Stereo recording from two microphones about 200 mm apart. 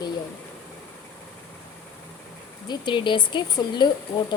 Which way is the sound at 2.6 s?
25° left (ahead or behind).